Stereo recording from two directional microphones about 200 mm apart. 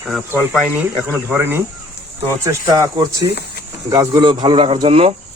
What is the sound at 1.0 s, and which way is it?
Speech, 10° right (ahead or behind).